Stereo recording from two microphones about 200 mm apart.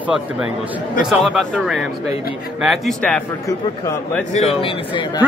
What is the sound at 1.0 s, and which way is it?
Speech, centre (ahead or behind).